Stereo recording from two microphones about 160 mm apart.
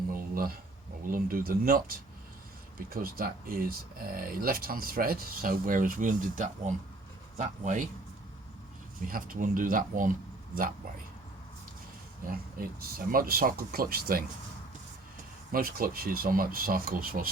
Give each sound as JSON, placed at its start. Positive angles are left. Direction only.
{"t": 0.1, "sound": "a sound", "side_deg": -65}
{"t": 1.0, "sound": "speech", "side_deg": -60}
{"t": 2.9, "sound": "speech", "side_deg": -65}
{"t": 9.0, "sound": "speech", "side_deg": -60}
{"t": 12.2, "sound": "speech", "side_deg": -65}
{"t": 15.5, "sound": "speech", "side_deg": -65}